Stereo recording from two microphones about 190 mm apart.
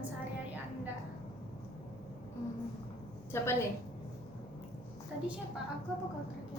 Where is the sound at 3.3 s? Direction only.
15° left (ahead or behind).